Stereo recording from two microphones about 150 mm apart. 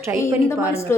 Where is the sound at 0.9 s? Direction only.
15° left (ahead or behind).